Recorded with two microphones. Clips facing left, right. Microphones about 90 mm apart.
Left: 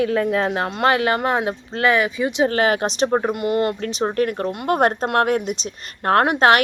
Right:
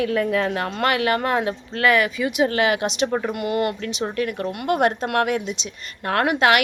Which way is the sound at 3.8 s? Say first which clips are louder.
Left 4 dB; 40° left (ahead or behind).